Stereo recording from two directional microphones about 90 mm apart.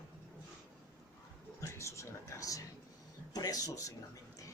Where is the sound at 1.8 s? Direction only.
35° left (ahead or behind).